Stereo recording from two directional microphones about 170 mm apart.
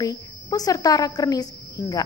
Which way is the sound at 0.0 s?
20° left (ahead or behind).